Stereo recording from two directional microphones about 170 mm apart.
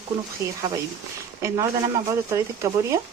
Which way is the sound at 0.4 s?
20° right (ahead or behind).